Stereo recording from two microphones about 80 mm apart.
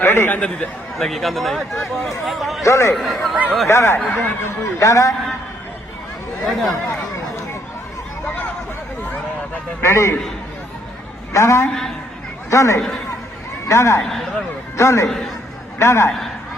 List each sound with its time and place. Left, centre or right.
0.0 s a man's voice: left
0.9 s speech: centre
2.6 s speech: left
2.9 s speech: centre
3.7 s speech: left
6.4 s speech: centre
9.8 s speech: left
11.3 s a man's voice: left
11.6 s speech: centre
12.5 s speech: left
14.1 s speech: centre
14.8 s speech: left